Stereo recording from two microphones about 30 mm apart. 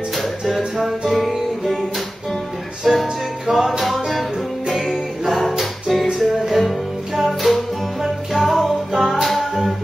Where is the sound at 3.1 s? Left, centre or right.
Centre.